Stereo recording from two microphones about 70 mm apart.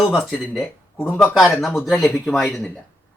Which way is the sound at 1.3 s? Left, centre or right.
Centre.